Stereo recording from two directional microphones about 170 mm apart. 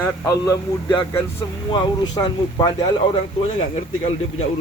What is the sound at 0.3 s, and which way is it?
A man's voice, 20° left (ahead or behind).